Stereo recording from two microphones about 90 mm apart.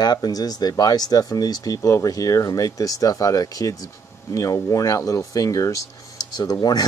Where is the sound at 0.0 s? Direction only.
45° left (ahead or behind).